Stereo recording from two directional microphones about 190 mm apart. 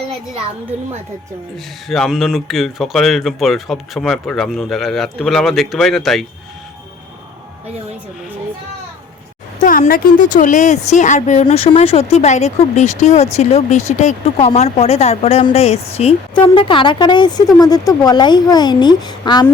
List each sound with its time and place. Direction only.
0.7 s speech: 35° right (ahead or behind)
1.9 s speech: centre (ahead or behind)
9.6 s speech: 40° left (ahead or behind); by 19.5 s 20° left (ahead or behind)